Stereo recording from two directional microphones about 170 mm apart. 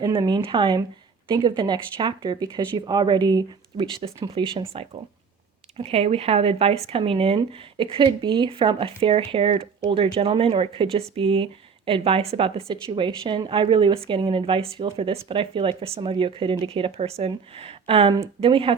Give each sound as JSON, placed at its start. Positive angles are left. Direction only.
{"t": 0.0, "sound": "speech", "side_deg": -25}
{"t": 5.7, "sound": "speech", "side_deg": -35}